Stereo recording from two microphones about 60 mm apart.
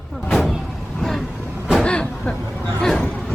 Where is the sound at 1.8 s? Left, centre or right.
Centre.